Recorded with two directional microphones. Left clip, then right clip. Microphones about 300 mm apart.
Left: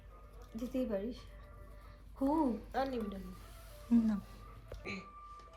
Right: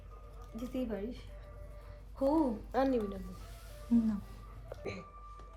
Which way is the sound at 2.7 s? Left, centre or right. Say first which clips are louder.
Right 5 dB; right.